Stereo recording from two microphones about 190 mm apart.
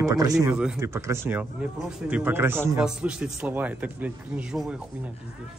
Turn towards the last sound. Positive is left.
turn(degrees=-5)  # may be behind; listen again after turning